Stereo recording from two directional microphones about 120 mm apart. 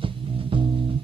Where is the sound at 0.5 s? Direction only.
45° right (ahead or behind).